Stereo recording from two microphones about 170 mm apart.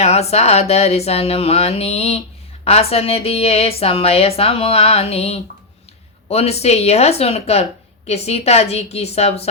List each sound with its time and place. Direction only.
0.0 s speech: 40° left (ahead or behind)